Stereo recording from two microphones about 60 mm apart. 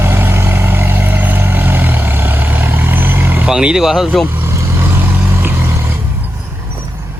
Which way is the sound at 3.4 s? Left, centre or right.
Centre.